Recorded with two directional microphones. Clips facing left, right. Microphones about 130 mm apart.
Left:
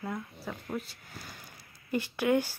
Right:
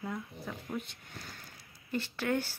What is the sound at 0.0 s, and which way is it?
Speech, 10° left (ahead or behind).